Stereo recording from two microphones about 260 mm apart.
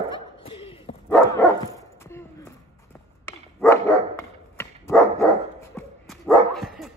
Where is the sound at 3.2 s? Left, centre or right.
Centre.